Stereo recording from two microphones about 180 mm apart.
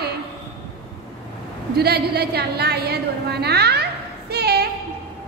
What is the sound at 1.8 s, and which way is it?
A woman's voice, 60° right (ahead or behind).